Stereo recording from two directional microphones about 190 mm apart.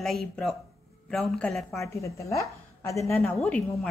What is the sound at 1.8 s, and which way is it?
A woman's voice, 15° left (ahead or behind).